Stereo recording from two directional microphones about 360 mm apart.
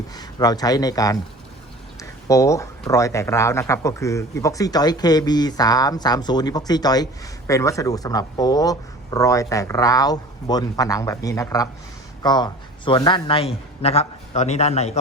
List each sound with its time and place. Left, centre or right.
0.1 s speech: centre